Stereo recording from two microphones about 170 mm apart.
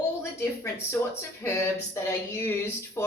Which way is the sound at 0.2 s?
15° left (ahead or behind).